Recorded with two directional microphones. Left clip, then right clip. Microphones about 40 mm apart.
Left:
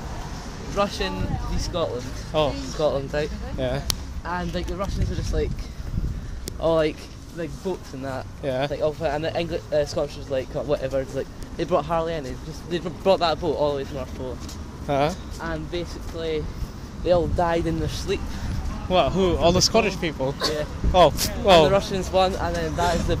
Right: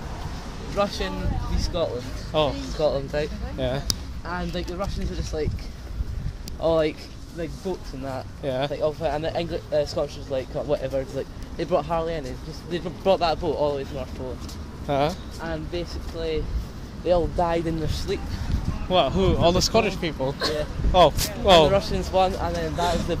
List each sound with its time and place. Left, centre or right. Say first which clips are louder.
0.7 s speech: left 1 dB; left
2.3 s speech: even; centre
2.8 s speech: even; left
3.5 s speech: even; centre
4.3 s speech: left 2 dB; left
6.6 s speech: left 1 dB; left
8.4 s speech: left 1 dB; centre
8.7 s speech: left 1 dB; left
11.7 s speech: left 1 dB; left
14.9 s speech: left 1 dB; centre
15.4 s speech: left 1 dB; left
18.9 s speech: left 1 dB; centre
21.7 s speech: left 1 dB; left
22.7 s speech: left 2 dB; centre